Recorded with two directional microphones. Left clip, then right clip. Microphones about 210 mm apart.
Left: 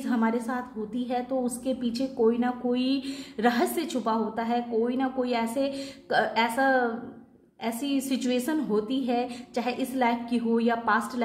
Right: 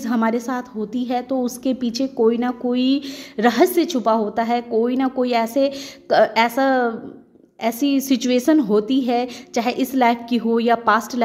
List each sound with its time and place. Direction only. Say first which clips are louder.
0.0 s a woman's voice: right 7 dB; 40° right (ahead or behind)